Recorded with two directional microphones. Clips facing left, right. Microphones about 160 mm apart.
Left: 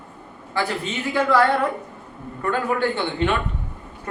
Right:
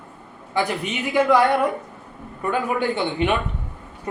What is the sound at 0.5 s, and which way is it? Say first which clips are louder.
Speech: right 1 dB; 15° right (ahead or behind).